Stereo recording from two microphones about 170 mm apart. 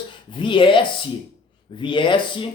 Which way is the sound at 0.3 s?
30° left (ahead or behind).